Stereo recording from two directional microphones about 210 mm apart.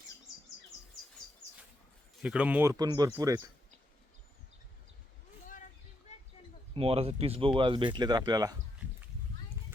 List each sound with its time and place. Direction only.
2.2 s speech: 5° right (ahead or behind)
6.7 s speech: 25° right (ahead or behind)